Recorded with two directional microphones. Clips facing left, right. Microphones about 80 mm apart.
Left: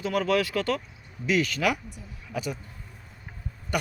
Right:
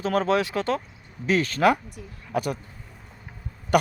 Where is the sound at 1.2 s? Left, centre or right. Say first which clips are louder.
Right 4 dB; right.